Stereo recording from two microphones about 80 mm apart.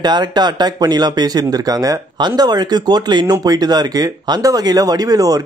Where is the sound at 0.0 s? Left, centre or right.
Right.